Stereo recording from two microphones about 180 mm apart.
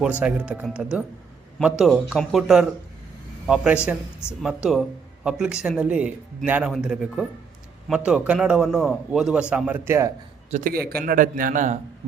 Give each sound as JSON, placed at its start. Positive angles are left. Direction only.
{"t": 0.0, "sound": "a man's voice", "side_deg": -5}
{"t": 10.5, "sound": "a man's voice", "side_deg": -50}